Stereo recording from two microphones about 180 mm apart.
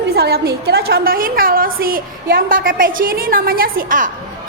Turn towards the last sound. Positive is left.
turn(degrees=-45)  # may be behind; listen again after turning